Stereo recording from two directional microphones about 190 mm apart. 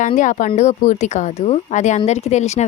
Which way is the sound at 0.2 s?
40° left (ahead or behind).